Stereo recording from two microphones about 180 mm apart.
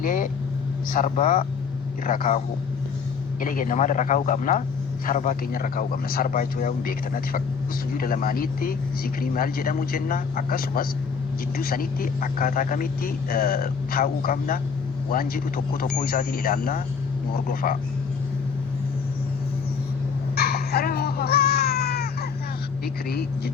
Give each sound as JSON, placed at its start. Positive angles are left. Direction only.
{"t": 0.0, "sound": "speech", "side_deg": 50}
{"t": 3.4, "sound": "speech", "side_deg": 50}
{"t": 20.3, "sound": "baby cry", "side_deg": 60}